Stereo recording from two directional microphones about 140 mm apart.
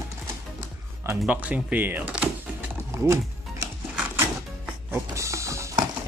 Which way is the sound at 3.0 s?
20° right (ahead or behind).